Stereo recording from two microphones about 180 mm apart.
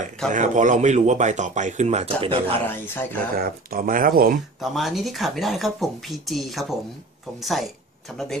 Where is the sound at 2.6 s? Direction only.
10° left (ahead or behind).